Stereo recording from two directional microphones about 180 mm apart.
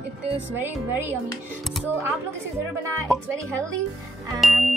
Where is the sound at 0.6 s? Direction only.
10° right (ahead or behind).